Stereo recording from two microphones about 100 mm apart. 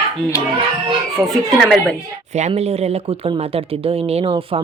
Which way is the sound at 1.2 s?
30° right (ahead or behind).